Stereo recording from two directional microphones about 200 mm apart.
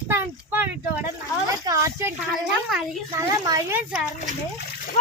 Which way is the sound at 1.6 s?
15° right (ahead or behind).